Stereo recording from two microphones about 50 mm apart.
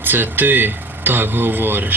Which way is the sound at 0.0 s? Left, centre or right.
Right.